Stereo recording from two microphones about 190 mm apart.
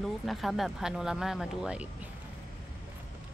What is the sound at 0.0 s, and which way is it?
Speech, centre (ahead or behind).